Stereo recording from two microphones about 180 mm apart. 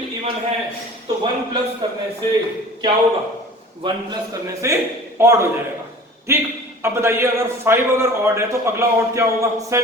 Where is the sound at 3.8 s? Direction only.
30° right (ahead or behind).